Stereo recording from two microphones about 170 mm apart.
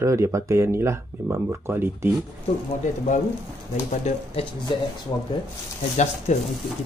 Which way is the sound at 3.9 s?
40° left (ahead or behind).